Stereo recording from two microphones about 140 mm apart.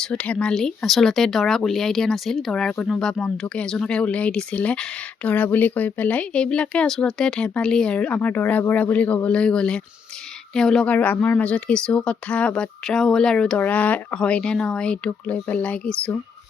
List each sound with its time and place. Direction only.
0.0 s speech: 10° left (ahead or behind)